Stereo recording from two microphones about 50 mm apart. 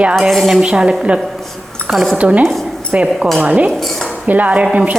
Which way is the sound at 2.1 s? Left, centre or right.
Right.